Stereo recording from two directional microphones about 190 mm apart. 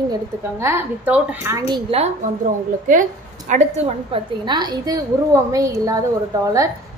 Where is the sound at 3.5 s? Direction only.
40° right (ahead or behind).